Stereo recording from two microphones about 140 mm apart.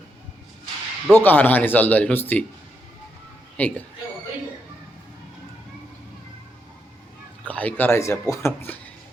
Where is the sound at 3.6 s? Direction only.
10° left (ahead or behind).